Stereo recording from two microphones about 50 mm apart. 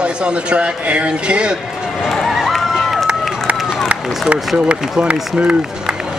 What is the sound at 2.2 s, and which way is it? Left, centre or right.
Run, centre.